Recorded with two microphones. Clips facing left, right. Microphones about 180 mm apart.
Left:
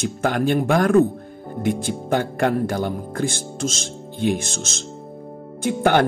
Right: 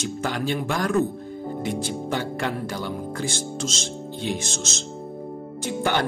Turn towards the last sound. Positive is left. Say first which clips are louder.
# left 6 dB
turn(degrees=55)  # may be behind; listen again after turning